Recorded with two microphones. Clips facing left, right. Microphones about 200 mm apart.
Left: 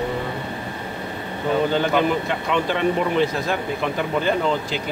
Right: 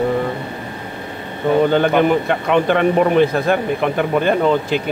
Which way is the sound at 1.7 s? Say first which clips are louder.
Right 6 dB; 55° right (ahead or behind).